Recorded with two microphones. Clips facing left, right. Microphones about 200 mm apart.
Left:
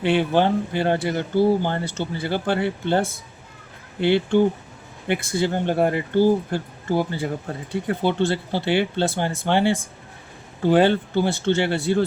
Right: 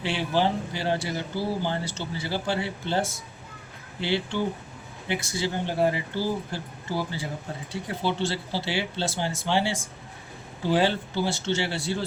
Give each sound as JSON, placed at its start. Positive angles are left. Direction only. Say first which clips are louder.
{"t": 0.0, "sound": "speech", "louder": "left 6 dB", "side_deg": 55}